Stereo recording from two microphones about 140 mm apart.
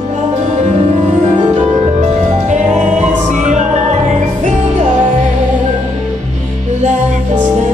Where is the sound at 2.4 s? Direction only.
55° right (ahead or behind).